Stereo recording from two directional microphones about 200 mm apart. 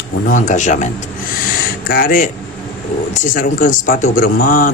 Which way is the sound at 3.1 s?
45° left (ahead or behind).